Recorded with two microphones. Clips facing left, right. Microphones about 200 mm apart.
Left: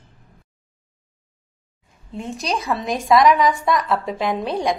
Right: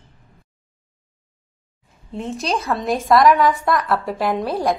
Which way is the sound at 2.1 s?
Centre (ahead or behind).